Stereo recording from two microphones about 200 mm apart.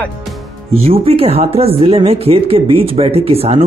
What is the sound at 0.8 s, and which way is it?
Speech, 30° right (ahead or behind).